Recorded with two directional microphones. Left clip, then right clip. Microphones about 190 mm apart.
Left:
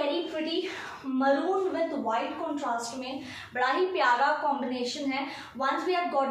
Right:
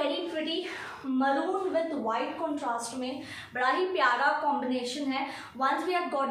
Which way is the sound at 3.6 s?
20° right (ahead or behind).